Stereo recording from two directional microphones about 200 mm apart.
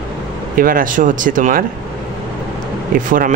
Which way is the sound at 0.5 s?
45° right (ahead or behind).